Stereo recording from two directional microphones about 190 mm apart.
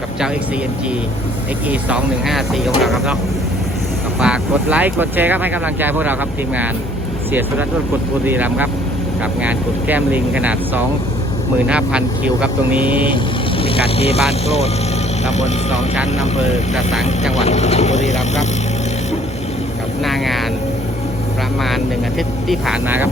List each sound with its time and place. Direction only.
1.7 s speech: 5° right (ahead or behind)
4.2 s speech: 5° right (ahead or behind)
8.3 s speech: 10° right (ahead or behind)
12.8 s speech: 25° left (ahead or behind)
16.7 s speech: centre (ahead or behind)
17.3 s speech: 35° left (ahead or behind)
20.1 s vehicle: centre (ahead or behind)
22.4 s speech: centre (ahead or behind)